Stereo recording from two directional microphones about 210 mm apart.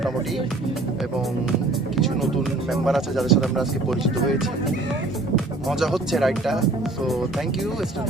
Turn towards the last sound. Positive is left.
turn(degrees=0)  # may be behind; listen again after turning